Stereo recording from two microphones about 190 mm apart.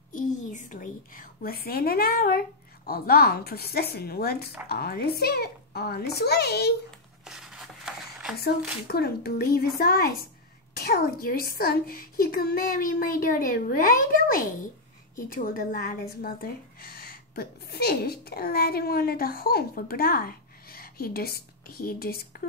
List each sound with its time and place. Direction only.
0.1 s a woman's voice: 45° left (ahead or behind)
7.2 s a sound: centre (ahead or behind)
8.4 s speech: 55° left (ahead or behind)